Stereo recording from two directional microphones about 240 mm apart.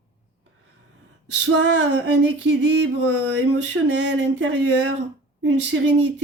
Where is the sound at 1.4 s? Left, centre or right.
Right.